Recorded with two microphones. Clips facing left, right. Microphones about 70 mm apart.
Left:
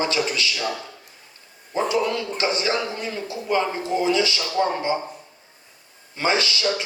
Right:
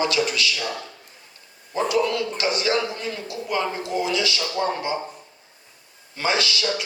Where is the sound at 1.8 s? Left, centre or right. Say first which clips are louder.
Right 2 dB; left.